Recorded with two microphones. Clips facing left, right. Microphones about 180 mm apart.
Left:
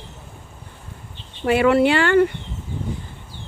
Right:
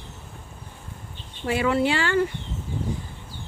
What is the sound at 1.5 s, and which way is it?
Speech, 65° left (ahead or behind).